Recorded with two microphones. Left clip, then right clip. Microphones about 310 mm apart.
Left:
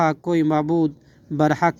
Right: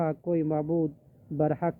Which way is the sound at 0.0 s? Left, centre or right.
Left.